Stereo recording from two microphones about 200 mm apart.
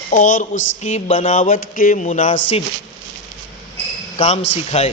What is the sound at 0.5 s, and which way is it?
Speech, 70° left (ahead or behind).